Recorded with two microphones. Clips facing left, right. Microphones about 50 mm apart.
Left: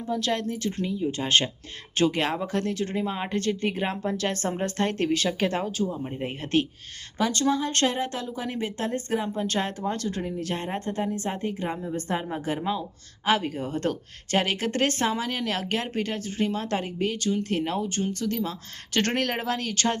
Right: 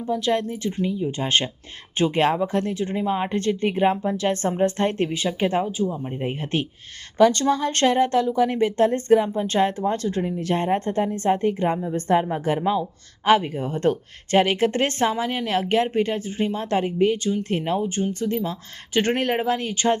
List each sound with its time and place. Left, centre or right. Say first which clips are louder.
0.0 s speech: right 4 dB; right
3.1 s speech: right 5 dB; right
5.0 s speech: right 1 dB; centre
5.8 s speech: right 3 dB; centre
6.2 s speech: left 1 dB; right
7.2 s speech: right 7 dB; right
18.9 s speech: right 4 dB; centre